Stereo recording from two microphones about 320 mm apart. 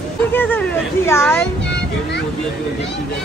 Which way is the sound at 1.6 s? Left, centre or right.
Left.